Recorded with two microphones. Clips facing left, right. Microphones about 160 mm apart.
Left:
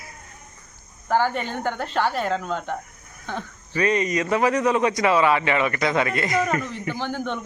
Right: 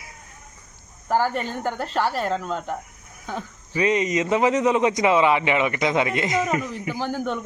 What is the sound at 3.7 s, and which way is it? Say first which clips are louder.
A man's voice: right 1 dB; 20° right (ahead or behind).